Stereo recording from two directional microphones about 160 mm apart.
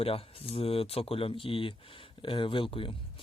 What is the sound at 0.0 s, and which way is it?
Speech, 35° left (ahead or behind).